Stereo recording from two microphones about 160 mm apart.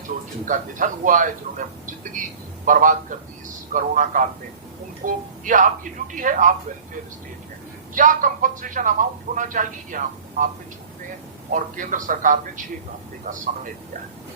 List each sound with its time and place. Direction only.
0.4 s speech: 55° right (ahead or behind)
2.6 s speech: 55° right (ahead or behind)
7.9 s speech: 55° right (ahead or behind)
11.5 s speech: 55° right (ahead or behind)